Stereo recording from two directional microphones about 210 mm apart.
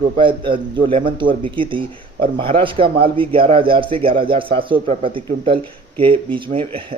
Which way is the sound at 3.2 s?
25° right (ahead or behind).